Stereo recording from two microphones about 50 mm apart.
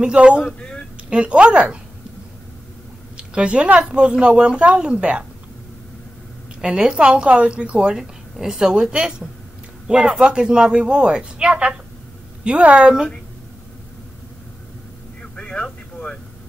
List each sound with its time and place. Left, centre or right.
0.0 s a woman's voice: right
3.2 s a sound: right
3.8 s a woman's voice: centre
6.6 s a woman's voice: centre
7.9 s a woman's voice: centre
15.3 s vehicle: centre